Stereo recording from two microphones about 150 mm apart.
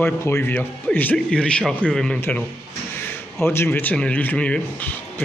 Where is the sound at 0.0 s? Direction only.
15° left (ahead or behind).